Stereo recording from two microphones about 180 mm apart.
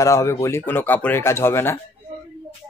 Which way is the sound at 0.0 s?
15° left (ahead or behind).